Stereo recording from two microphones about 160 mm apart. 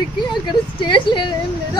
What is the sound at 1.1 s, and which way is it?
Speech, 30° left (ahead or behind).